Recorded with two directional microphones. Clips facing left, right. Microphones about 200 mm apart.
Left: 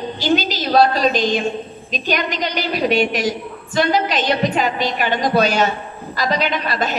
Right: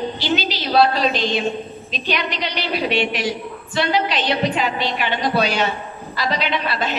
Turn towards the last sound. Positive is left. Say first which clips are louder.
# left 1 dB
turn(degrees=45)  # may be behind; listen again after turning